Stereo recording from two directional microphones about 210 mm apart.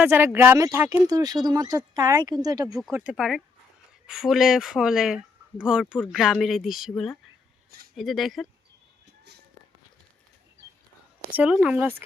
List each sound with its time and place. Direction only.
0.0 s speech: 10° right (ahead or behind)
2.9 s speech: 5° right (ahead or behind)
11.3 s speech: 5° right (ahead or behind)